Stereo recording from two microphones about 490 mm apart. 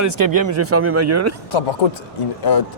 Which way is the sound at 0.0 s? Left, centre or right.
Right.